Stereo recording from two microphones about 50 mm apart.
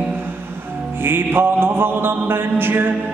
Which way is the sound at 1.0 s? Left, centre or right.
Right.